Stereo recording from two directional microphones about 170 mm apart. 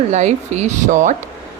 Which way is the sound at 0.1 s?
40° right (ahead or behind).